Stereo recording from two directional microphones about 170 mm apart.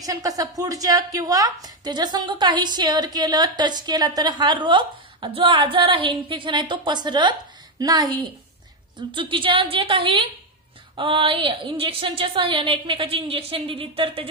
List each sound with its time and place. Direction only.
0.0 s a woman's voice: 20° right (ahead or behind)